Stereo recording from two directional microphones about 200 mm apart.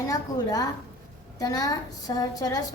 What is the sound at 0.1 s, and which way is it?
A woman's voice, 15° left (ahead or behind).